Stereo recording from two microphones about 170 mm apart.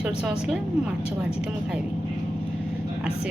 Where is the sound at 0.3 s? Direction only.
5° right (ahead or behind).